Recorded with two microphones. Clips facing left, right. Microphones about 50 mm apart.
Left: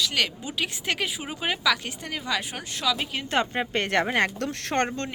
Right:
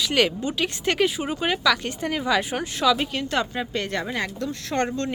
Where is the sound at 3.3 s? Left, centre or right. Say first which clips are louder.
Left 4 dB; left.